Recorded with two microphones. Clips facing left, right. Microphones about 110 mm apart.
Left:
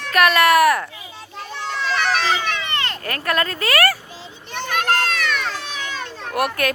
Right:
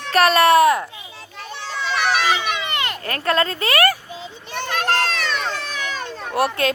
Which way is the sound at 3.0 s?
25° right (ahead or behind).